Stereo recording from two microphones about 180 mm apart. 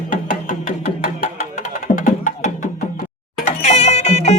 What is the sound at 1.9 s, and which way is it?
Music, 45° left (ahead or behind).